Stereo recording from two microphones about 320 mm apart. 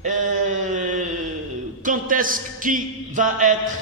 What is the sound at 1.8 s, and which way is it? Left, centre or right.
A man's voice, right.